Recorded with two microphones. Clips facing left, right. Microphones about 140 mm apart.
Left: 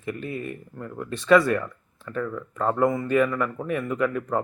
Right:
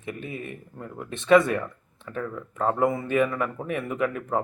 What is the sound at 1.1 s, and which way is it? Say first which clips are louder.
Speech: even; 20° right (ahead or behind).